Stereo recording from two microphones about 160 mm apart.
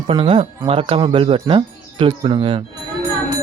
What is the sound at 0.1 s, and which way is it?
Speech, 35° right (ahead or behind).